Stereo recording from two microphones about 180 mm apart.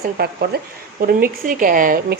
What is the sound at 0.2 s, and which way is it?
A woman's voice, 55° right (ahead or behind).